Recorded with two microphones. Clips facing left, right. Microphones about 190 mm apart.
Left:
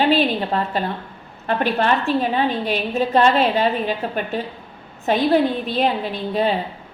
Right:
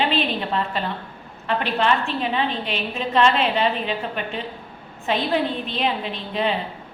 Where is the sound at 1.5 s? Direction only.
45° left (ahead or behind).